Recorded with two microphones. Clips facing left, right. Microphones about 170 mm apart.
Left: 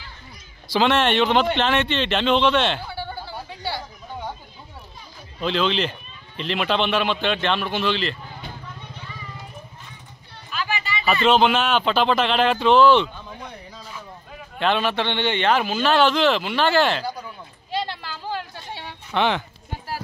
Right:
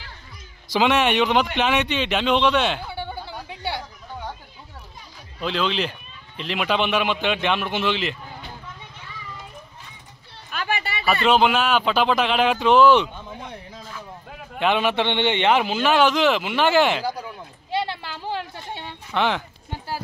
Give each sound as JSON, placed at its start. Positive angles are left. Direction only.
{"t": 0.7, "sound": "a man's voice", "side_deg": -10}
{"t": 2.9, "sound": "a sound", "side_deg": -20}
{"t": 3.4, "sound": "chatter", "side_deg": -20}
{"t": 5.4, "sound": "a man's voice", "side_deg": -5}
{"t": 10.5, "sound": "a sound", "side_deg": -55}
{"t": 11.2, "sound": "a man's voice", "side_deg": -5}
{"t": 14.6, "sound": "a man's voice", "side_deg": -15}
{"t": 17.6, "sound": "a sound", "side_deg": -25}
{"t": 19.1, "sound": "speech", "side_deg": -5}